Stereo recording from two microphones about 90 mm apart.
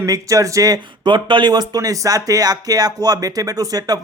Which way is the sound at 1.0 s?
60° right (ahead or behind).